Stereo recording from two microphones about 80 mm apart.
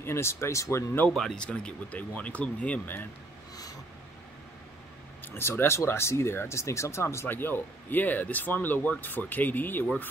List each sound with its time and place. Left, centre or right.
0.0 s speech: left
1.1 s speech: centre
5.2 s speech: left